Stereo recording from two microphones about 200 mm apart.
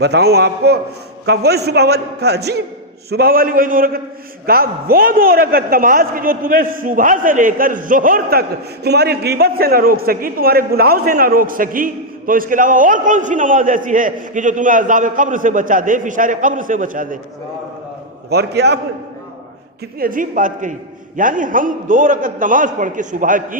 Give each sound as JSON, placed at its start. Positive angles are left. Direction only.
{"t": 0.0, "sound": "a man's voice", "side_deg": -55}
{"t": 18.3, "sound": "a man's voice", "side_deg": -55}
{"t": 20.0, "sound": "a man's voice", "side_deg": -40}